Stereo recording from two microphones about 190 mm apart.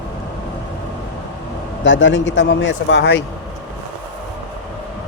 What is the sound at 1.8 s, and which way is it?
Speech, 75° left (ahead or behind).